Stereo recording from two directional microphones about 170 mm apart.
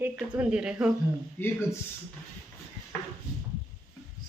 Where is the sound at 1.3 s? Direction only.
15° left (ahead or behind).